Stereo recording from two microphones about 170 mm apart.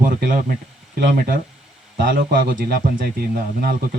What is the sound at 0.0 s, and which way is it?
Speech, 55° right (ahead or behind).